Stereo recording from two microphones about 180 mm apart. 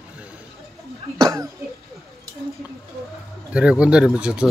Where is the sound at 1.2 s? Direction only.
20° right (ahead or behind).